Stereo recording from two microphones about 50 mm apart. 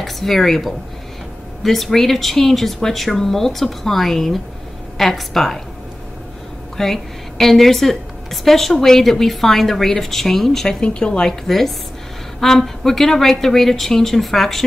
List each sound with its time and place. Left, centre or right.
0.0 s a woman's voice: centre
6.8 s a woman's voice: centre
10.8 s speech: left
11.4 s a woman's voice: centre